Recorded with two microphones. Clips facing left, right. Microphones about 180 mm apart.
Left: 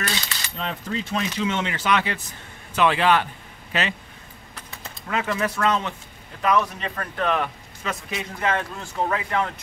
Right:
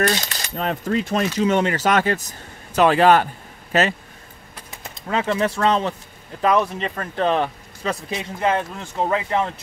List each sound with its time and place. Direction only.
0.0 s speech: 50° right (ahead or behind)
5.0 s a man's voice: 30° right (ahead or behind)